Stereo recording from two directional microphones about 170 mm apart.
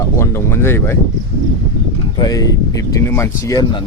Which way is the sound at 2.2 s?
20° left (ahead or behind).